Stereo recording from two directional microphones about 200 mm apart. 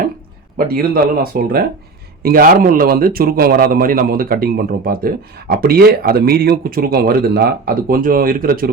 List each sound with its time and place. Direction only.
0.5 s a man's voice: 45° right (ahead or behind)